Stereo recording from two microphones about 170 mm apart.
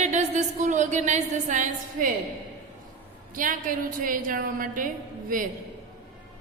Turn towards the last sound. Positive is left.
turn(degrees=-55)  # may be behind; listen again after turning